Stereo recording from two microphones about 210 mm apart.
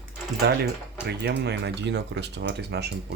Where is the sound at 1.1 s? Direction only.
55° right (ahead or behind).